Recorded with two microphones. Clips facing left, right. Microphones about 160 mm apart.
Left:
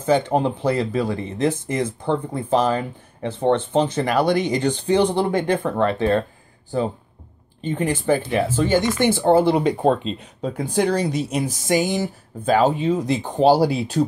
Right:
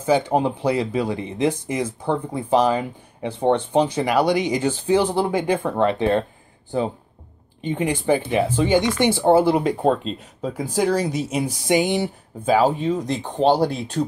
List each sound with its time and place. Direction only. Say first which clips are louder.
0.0 s speech: even; 10° right (ahead or behind)
7.6 s speech: even; 15° right (ahead or behind); by 14.0 s 5° left (ahead or behind)